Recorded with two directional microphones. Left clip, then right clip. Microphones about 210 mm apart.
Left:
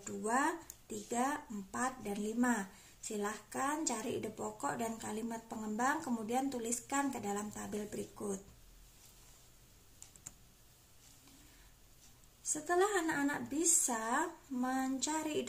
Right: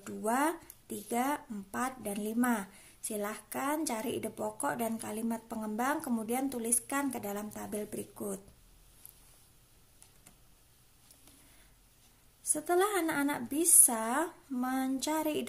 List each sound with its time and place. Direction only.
0.0 s a sound: 40° right (ahead or behind)
1.0 s speech: 40° right (ahead or behind)
12.4 s speech: 35° right (ahead or behind)